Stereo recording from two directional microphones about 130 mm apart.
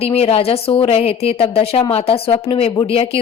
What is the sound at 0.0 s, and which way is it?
Speech, 50° left (ahead or behind).